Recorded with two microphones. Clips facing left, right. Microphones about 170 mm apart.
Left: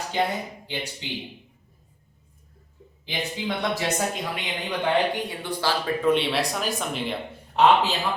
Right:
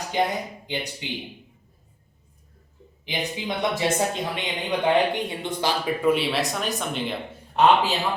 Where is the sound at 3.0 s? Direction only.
15° right (ahead or behind).